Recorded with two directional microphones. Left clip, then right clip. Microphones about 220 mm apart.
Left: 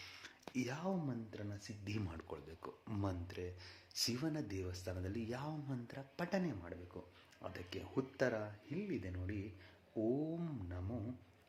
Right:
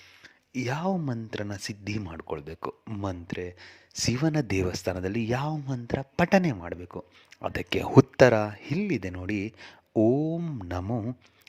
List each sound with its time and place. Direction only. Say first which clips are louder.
0.5 s speech: right 13 dB; 35° right (ahead or behind)
10.7 s speech: right 16 dB; 50° right (ahead or behind)